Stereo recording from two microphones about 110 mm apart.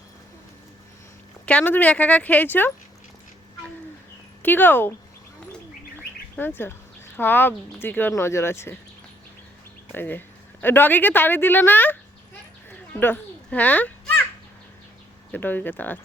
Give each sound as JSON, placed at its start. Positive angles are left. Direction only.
{"t": 1.5, "sound": "a woman's voice", "side_deg": 15}
{"t": 4.4, "sound": "a woman's voice", "side_deg": 15}
{"t": 6.0, "sound": "bird", "side_deg": 15}
{"t": 7.2, "sound": "speech", "side_deg": 20}
{"t": 9.9, "sound": "a woman's voice", "side_deg": 20}
{"t": 12.9, "sound": "children playing", "side_deg": 20}
{"t": 15.3, "sound": "a woman's voice", "side_deg": 15}